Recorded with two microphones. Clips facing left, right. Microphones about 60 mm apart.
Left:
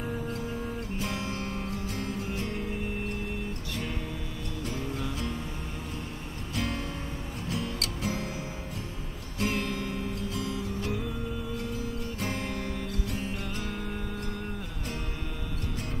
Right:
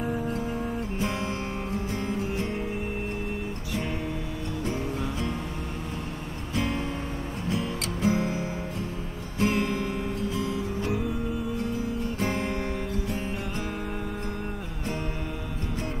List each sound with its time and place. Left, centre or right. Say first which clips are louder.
0.0 s music: right 5 dB; centre
6.5 s music: right 4 dB; right
12.2 s music: right 4 dB; right